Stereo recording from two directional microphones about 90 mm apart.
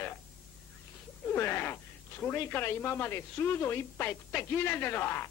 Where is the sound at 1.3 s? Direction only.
25° left (ahead or behind).